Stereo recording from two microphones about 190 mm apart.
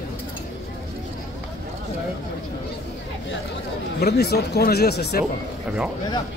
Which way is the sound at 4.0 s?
60° left (ahead or behind).